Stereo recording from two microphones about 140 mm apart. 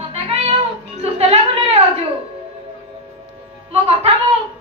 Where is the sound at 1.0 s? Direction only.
45° right (ahead or behind).